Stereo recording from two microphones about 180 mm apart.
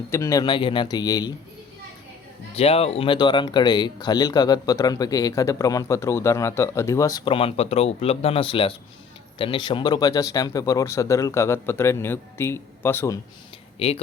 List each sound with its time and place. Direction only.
0.1 s speech: 15° left (ahead or behind)
2.6 s speech: 35° left (ahead or behind)
7.3 s speech: 35° left (ahead or behind); by 13.1 s 15° left (ahead or behind)
13.7 s speech: 35° left (ahead or behind)